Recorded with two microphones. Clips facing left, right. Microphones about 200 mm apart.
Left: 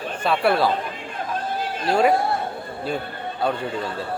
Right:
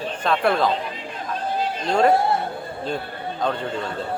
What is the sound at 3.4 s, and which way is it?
Speech, 10° left (ahead or behind).